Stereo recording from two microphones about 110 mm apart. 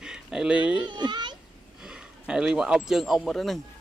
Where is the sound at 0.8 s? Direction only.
45° right (ahead or behind).